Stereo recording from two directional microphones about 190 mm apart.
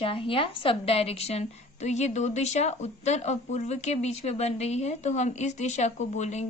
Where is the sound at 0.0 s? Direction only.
30° left (ahead or behind).